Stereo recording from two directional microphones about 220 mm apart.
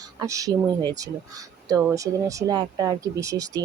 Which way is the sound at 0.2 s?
15° right (ahead or behind).